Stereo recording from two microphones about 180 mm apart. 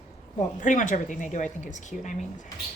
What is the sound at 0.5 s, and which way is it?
A woman's voice, 45° left (ahead or behind).